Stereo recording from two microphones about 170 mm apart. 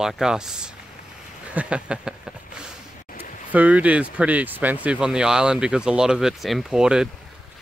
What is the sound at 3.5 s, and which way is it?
Speech, 10° right (ahead or behind).